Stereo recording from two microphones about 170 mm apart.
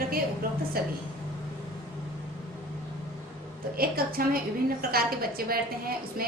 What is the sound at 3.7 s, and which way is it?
A woman's voice, 60° right (ahead or behind).